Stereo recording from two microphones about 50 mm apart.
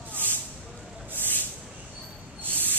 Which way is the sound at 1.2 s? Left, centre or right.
Left.